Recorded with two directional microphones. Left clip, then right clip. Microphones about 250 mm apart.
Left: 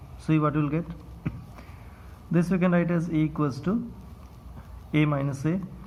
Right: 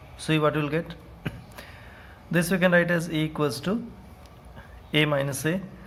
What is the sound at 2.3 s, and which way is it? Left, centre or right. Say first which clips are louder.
Speech: right 4 dB; right.